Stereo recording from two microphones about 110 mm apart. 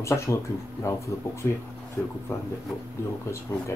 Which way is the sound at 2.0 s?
10° left (ahead or behind).